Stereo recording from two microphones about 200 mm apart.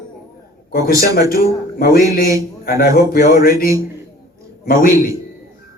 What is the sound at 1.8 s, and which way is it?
Speech, 45° left (ahead or behind).